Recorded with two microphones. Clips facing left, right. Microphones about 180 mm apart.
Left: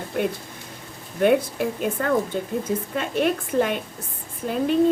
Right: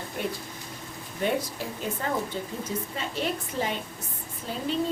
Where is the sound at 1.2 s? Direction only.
60° left (ahead or behind).